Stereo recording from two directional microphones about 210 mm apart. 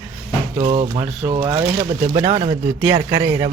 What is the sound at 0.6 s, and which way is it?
Speech, 25° right (ahead or behind).